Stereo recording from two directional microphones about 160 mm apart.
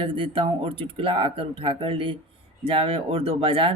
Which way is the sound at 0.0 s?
35° right (ahead or behind).